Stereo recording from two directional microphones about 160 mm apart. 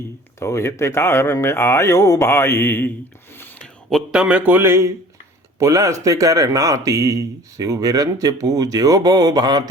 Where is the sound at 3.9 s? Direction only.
Centre (ahead or behind).